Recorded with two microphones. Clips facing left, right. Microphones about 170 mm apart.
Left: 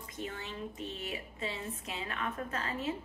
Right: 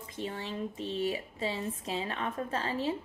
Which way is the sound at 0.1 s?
30° right (ahead or behind).